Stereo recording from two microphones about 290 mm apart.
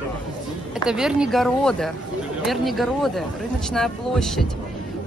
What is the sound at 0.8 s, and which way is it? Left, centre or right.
A woman's voice, centre.